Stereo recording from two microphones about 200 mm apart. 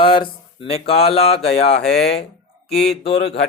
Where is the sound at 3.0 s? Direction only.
55° left (ahead or behind).